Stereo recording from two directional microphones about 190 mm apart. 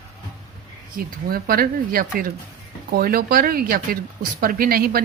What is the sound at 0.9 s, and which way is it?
A woman's voice, 50° right (ahead or behind).